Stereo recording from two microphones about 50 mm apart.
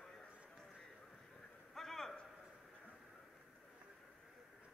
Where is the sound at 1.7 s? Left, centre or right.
Centre.